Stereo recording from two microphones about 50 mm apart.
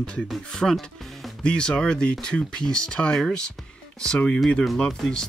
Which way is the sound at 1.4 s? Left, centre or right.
Centre.